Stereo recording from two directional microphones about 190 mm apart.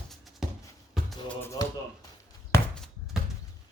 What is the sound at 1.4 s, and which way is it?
Speech, 15° left (ahead or behind).